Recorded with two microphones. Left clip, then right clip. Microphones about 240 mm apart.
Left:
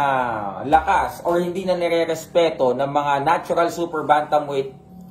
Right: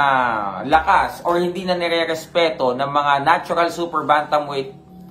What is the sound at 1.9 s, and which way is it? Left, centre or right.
Speech, right.